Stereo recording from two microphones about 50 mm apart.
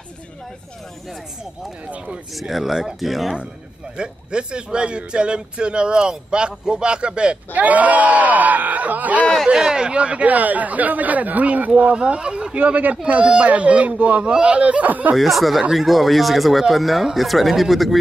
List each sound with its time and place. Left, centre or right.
2.3 s speech: centre
3.9 s a man's voice: centre
7.5 s speech: right
9.5 s a man's voice: centre
12.5 s a man's voice: right
15.1 s speech: centre